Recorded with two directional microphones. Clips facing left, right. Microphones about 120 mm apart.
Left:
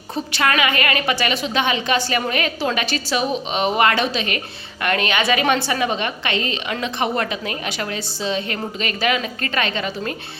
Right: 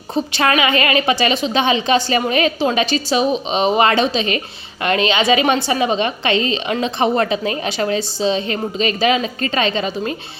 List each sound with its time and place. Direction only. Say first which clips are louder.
0.1 s a woman's voice: right 4 dB; 25° right (ahead or behind)